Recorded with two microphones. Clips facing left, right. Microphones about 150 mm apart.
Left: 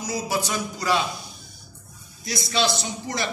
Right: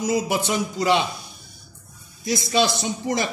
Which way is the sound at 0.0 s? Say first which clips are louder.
Right 5 dB; 20° right (ahead or behind).